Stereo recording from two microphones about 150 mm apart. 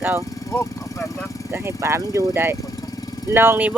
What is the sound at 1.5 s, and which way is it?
Speech, 15° right (ahead or behind).